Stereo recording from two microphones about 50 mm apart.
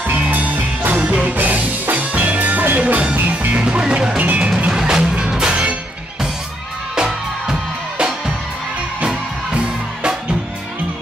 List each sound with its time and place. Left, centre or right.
0.0 s music: right
7.0 s music: centre
9.0 s music: centre